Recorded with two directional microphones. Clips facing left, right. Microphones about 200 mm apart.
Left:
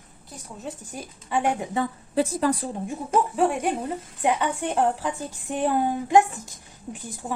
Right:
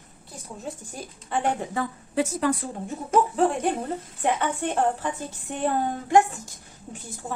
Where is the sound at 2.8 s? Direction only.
10° left (ahead or behind).